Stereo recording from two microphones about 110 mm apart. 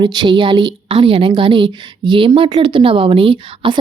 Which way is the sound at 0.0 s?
45° right (ahead or behind).